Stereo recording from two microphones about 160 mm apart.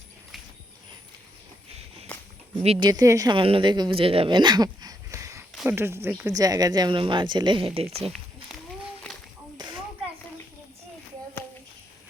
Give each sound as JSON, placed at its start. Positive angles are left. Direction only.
{"t": 2.6, "sound": "a woman's voice", "side_deg": -25}
{"t": 3.3, "sound": "a woman's voice", "side_deg": -35}
{"t": 9.6, "sound": "a sound", "side_deg": -25}